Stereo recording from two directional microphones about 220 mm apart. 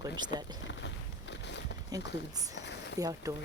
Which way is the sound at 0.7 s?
55° left (ahead or behind).